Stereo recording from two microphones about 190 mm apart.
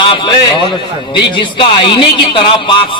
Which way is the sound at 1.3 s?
25° left (ahead or behind).